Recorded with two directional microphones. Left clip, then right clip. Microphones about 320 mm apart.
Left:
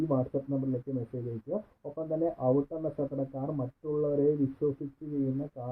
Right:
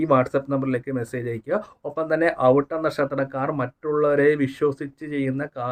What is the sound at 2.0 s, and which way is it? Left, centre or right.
Speech, right.